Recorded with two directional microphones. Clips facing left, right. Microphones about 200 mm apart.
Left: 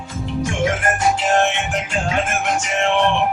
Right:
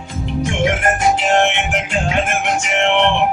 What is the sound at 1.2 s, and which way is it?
Music, 20° right (ahead or behind).